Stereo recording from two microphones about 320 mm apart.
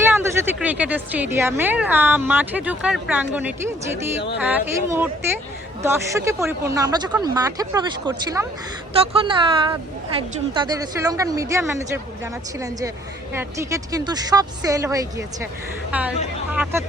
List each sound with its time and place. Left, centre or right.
0.1 s a woman's voice: centre